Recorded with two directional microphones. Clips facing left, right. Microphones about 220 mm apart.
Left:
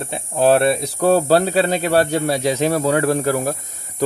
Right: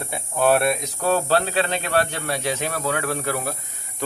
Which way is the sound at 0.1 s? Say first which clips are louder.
Left 4 dB; 30° left (ahead or behind).